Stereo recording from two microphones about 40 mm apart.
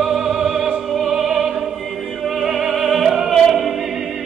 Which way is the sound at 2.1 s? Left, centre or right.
Centre.